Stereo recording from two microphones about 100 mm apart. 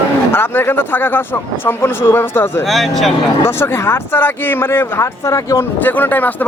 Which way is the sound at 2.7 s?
Centre (ahead or behind).